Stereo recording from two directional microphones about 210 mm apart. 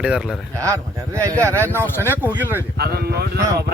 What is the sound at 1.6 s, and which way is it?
Speech, 10° left (ahead or behind).